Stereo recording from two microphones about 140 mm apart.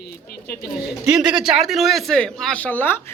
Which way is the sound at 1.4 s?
Centre (ahead or behind).